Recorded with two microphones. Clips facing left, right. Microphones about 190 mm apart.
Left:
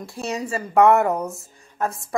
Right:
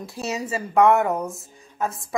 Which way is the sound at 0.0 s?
Centre (ahead or behind).